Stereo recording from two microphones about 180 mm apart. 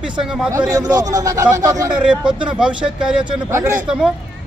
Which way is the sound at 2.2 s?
5° right (ahead or behind).